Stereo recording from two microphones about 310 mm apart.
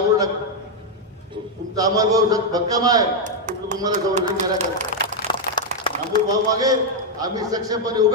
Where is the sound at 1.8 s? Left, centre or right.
Centre.